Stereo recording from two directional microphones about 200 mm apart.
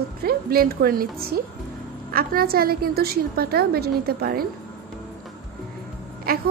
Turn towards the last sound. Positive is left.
turn(degrees=-50)  # may be behind; listen again after turning